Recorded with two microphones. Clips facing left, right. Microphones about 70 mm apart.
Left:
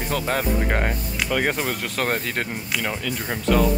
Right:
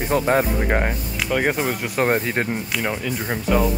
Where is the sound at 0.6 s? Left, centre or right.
Centre.